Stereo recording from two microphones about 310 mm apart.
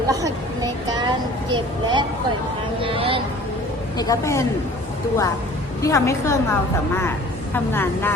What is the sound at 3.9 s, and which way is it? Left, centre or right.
Speech, centre.